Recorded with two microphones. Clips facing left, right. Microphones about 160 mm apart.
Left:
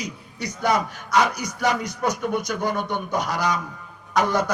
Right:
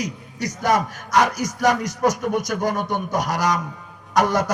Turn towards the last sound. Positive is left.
turn(degrees=-45)  # may be behind; listen again after turning